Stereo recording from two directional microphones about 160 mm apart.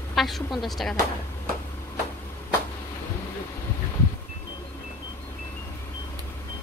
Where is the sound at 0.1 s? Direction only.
Centre (ahead or behind).